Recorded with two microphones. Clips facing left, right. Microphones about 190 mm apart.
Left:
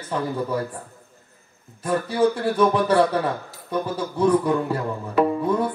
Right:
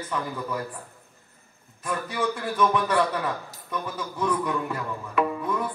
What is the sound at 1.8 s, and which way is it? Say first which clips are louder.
Music: left 8 dB; 30° left (ahead or behind).